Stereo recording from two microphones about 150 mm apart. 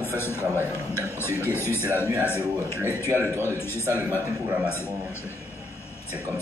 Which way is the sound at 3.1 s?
15° right (ahead or behind).